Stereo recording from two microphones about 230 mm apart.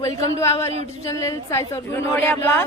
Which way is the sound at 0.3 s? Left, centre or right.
Centre.